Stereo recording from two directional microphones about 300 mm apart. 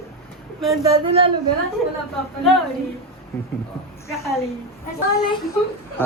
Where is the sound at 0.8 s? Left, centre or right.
Centre.